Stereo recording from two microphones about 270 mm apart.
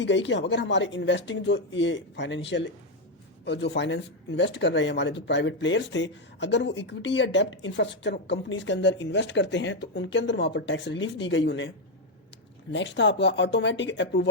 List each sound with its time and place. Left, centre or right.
0.0 s speech: left
12.7 s speech: left